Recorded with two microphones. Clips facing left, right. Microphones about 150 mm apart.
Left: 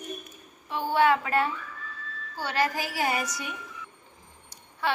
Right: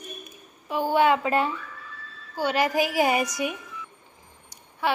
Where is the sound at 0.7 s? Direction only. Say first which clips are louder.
Right 2 dB; 15° right (ahead or behind).